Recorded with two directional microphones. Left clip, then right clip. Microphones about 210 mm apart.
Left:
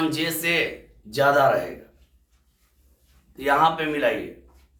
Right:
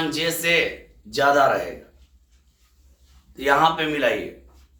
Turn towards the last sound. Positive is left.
turn(degrees=-10)  # may be behind; listen again after turning